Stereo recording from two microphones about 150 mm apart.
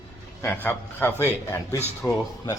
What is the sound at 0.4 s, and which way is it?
A man's voice, 15° left (ahead or behind).